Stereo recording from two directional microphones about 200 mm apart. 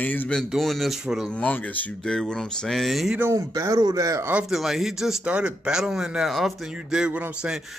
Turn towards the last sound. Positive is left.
turn(degrees=-5)  # may be behind; listen again after turning